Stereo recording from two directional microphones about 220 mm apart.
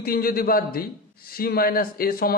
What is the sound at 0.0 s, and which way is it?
A man's voice, 40° left (ahead or behind).